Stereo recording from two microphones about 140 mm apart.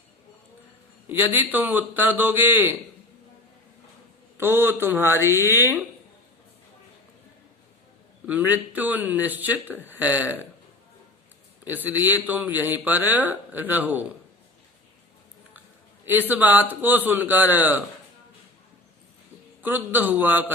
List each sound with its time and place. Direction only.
1.0 s a man's voice: 15° right (ahead or behind)
4.4 s a man's voice: 15° right (ahead or behind)
8.3 s a man's voice: 10° right (ahead or behind)
11.6 s a man's voice: 15° right (ahead or behind)
16.3 s a man's voice: 10° right (ahead or behind)
19.6 s a man's voice: 15° right (ahead or behind)